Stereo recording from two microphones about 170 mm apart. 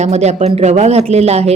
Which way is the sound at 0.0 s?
40° right (ahead or behind).